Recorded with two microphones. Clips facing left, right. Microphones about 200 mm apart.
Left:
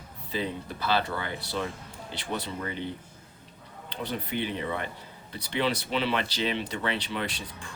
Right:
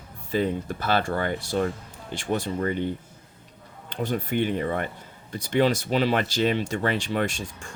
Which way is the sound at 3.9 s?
45° right (ahead or behind).